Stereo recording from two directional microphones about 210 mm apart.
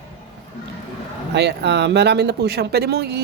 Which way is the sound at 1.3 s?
55° right (ahead or behind).